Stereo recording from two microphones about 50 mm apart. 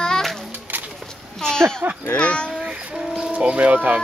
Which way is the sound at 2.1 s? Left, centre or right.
Left.